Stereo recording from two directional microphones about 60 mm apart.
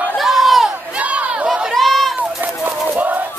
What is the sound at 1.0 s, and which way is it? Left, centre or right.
Battle cry, right.